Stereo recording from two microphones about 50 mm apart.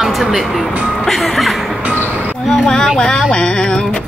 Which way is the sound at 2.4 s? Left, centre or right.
Centre.